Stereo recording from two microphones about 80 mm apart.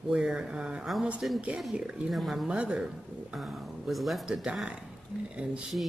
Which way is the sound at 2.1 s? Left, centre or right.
Centre.